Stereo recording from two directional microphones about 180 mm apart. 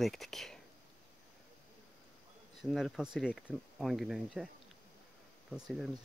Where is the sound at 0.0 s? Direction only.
Centre (ahead or behind).